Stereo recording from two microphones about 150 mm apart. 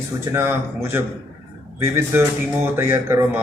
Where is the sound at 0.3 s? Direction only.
15° right (ahead or behind).